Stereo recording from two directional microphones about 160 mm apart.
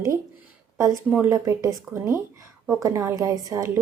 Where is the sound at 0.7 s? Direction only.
20° right (ahead or behind).